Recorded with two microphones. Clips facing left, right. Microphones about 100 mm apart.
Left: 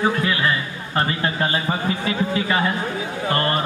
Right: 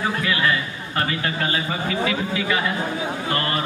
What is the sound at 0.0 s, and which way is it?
A man's voice, 25° left (ahead or behind).